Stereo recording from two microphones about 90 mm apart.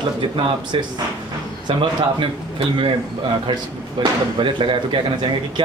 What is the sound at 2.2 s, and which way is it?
Speech, 70° right (ahead or behind).